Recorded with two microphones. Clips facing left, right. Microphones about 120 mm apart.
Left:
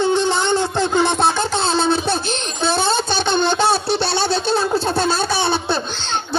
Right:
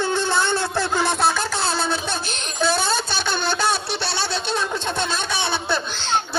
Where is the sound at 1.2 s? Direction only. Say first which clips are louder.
Left 3 dB; 25° left (ahead or behind).